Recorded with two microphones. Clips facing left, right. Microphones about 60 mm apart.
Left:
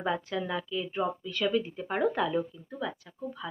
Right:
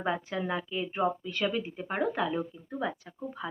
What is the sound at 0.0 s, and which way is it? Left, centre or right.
Speech, right.